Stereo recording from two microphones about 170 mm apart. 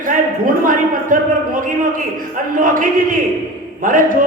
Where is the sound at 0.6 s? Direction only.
55° right (ahead or behind).